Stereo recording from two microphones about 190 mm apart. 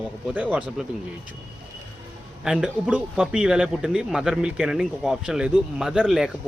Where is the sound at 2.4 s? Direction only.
5° right (ahead or behind).